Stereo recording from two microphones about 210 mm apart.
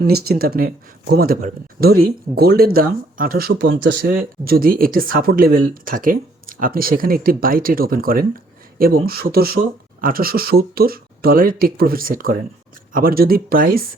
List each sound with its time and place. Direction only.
0.1 s speech: 45° right (ahead or behind)